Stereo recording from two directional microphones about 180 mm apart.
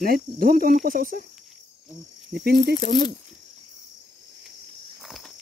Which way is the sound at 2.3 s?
55° right (ahead or behind).